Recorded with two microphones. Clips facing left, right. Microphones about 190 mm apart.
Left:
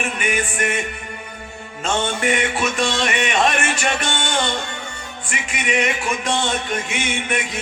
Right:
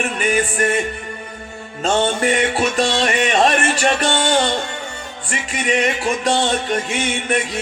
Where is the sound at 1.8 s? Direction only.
35° right (ahead or behind).